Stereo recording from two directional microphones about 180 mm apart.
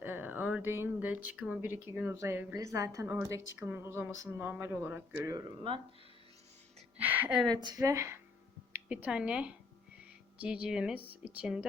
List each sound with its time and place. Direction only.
0.0 s speech: 10° right (ahead or behind)
3.3 s a woman's voice: 90° left
3.6 s speech: 10° right (ahead or behind)
6.9 s speech: 10° right (ahead or behind)
7.6 s a woman's voice: 20° right (ahead or behind)